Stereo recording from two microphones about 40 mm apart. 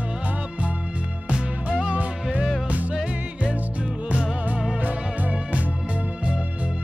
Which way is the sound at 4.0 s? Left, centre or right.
Right.